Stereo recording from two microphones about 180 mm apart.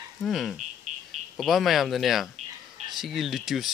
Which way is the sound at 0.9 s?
40° right (ahead or behind).